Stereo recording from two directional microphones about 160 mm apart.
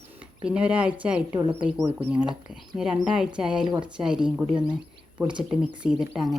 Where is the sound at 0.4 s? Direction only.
5° right (ahead or behind).